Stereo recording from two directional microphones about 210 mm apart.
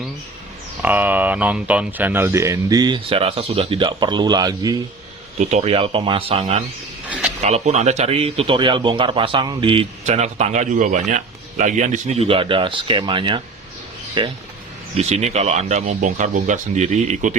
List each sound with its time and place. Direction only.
0.8 s speech: 10° right (ahead or behind)
5.4 s speech: 35° right (ahead or behind)